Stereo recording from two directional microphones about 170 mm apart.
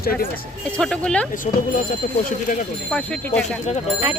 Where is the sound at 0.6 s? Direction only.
5° left (ahead or behind).